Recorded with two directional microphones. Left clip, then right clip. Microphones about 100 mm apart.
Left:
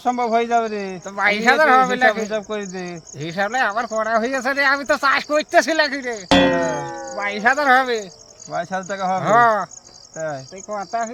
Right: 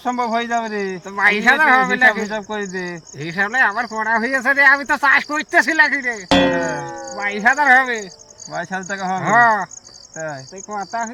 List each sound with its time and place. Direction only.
0.0 s speech: 40° left (ahead or behind)
6.2 s speech: centre (ahead or behind)
6.6 s music: 10° right (ahead or behind)
7.2 s speech: 40° left (ahead or behind)